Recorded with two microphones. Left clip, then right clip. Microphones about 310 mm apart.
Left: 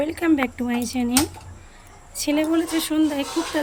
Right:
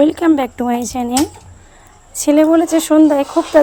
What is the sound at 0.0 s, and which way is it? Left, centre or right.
Speech, centre.